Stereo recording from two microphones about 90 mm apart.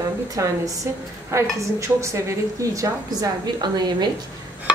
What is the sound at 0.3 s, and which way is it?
A woman's voice, 40° right (ahead or behind).